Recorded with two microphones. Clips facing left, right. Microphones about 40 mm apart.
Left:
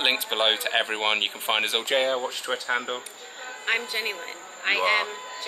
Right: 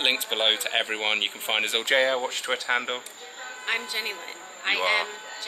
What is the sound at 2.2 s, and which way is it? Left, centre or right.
Speech, right.